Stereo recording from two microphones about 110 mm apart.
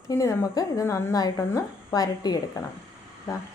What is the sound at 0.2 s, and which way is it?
A woman's voice, 30° left (ahead or behind).